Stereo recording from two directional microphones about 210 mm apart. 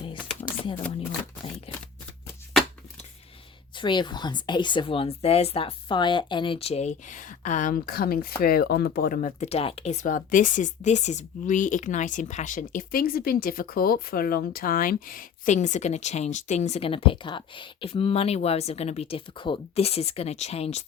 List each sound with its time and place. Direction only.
1.7 s shuffling cards: 25° left (ahead or behind)
3.8 s speech: 20° left (ahead or behind)